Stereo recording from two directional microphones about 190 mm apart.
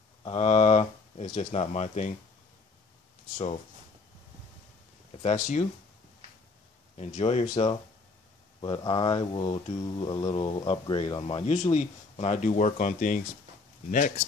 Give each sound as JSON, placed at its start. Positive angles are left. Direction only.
{"t": 0.2, "sound": "speech", "side_deg": 30}
{"t": 5.1, "sound": "speech", "side_deg": 40}
{"t": 7.0, "sound": "speech", "side_deg": 35}
{"t": 8.5, "sound": "speech", "side_deg": 25}